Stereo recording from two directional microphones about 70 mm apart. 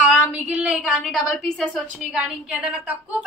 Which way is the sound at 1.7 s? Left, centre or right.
Centre.